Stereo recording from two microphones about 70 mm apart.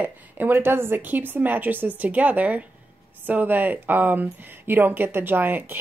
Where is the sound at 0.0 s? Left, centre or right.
Right.